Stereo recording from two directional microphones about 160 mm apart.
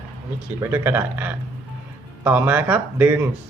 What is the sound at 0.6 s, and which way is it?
Speech, 15° right (ahead or behind).